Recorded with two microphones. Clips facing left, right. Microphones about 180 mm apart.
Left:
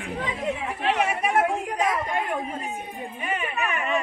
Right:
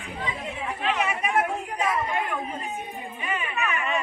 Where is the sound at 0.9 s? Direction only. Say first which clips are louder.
Left 3 dB; 65° left (ahead or behind).